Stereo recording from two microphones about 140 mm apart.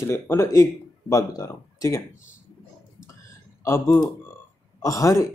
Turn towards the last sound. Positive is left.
turn(degrees=25)  # may be behind; listen again after turning